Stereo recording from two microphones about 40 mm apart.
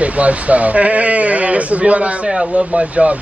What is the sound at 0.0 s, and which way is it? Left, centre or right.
A man's voice, right.